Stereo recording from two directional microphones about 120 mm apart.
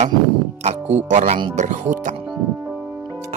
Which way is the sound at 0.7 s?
70° right (ahead or behind).